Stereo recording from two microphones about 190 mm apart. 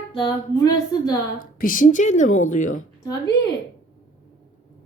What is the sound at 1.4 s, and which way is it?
Speech, 45° left (ahead or behind).